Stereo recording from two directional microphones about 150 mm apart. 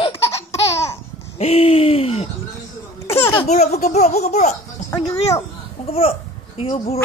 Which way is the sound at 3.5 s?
50° left (ahead or behind).